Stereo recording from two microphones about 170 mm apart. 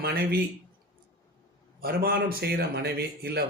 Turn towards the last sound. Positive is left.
turn(degrees=-70)  # may be behind; listen again after turning